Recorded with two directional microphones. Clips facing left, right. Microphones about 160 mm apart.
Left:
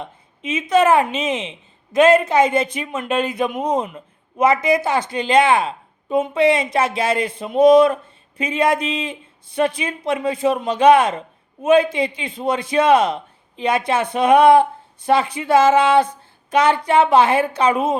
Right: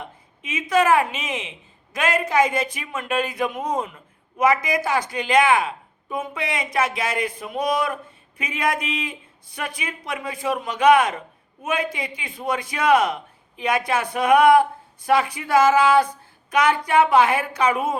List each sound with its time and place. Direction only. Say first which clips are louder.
0.0 s speech: left 6 dB; 25° left (ahead or behind)